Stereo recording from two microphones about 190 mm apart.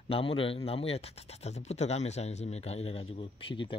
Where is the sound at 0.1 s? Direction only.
30° left (ahead or behind).